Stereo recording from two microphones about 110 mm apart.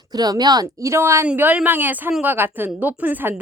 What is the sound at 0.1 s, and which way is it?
A woman's voice, 35° right (ahead or behind).